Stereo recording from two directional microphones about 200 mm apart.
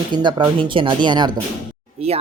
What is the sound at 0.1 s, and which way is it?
Speech, 25° right (ahead or behind).